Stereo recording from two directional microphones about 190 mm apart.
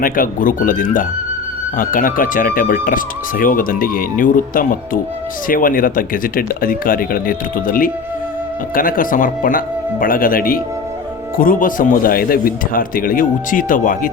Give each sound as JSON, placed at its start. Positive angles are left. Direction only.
{"t": 0.0, "sound": "speech", "side_deg": 45}